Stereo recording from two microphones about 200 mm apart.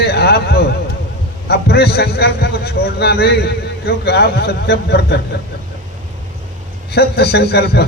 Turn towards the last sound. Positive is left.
turn(degrees=55)  # may be behind; listen again after turning